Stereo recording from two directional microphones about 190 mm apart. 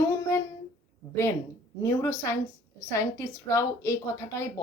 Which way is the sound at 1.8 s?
15° left (ahead or behind).